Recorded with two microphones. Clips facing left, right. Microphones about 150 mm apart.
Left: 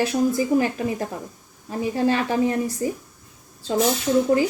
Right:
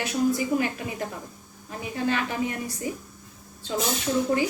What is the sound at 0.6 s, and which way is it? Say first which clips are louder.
Speech: left 6 dB; 35° left (ahead or behind).